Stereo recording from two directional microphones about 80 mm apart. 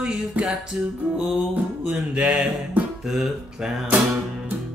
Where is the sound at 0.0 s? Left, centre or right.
Centre.